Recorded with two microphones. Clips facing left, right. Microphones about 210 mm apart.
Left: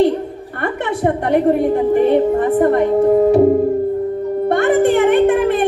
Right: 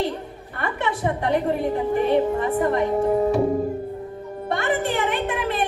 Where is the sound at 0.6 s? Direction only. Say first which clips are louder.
Left 6 dB; 55° left (ahead or behind).